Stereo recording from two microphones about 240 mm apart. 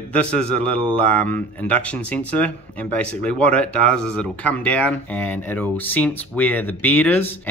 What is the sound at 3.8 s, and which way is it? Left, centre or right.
Speech, centre.